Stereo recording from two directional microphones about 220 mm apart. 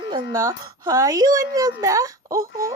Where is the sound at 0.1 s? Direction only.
15° right (ahead or behind).